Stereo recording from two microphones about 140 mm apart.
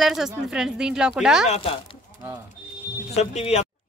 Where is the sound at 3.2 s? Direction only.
50° left (ahead or behind).